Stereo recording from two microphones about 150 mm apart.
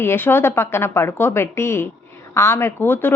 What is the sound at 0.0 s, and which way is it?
A woman's voice, 15° left (ahead or behind).